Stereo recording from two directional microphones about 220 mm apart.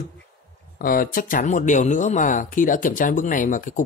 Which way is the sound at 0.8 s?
40° left (ahead or behind).